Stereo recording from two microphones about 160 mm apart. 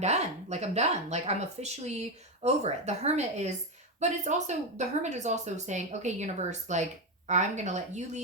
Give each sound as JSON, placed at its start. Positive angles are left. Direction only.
{"t": 0.0, "sound": "speech", "side_deg": -45}